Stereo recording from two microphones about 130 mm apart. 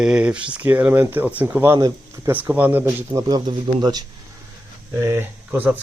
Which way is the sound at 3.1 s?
30° right (ahead or behind).